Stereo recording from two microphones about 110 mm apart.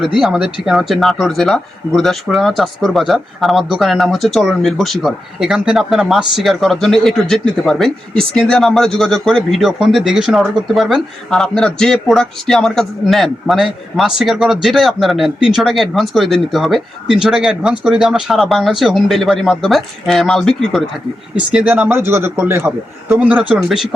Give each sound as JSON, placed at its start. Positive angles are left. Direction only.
{"t": 0.2, "sound": "speech", "side_deg": -5}
{"t": 21.3, "sound": "a man's voice", "side_deg": -10}